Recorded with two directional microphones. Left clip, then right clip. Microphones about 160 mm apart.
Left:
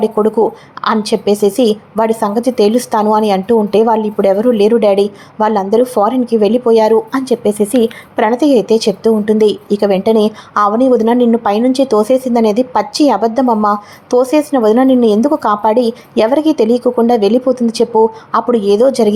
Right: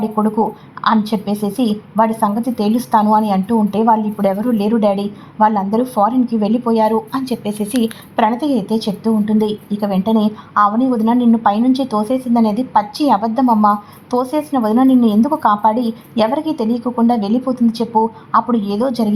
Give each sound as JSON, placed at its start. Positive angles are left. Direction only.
{"t": 0.0, "sound": "a woman's voice", "side_deg": 15}
{"t": 7.6, "sound": "a woman's voice", "side_deg": 5}